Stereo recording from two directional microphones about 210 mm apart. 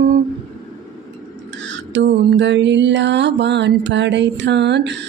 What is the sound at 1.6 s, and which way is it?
Mantra, 60° right (ahead or behind).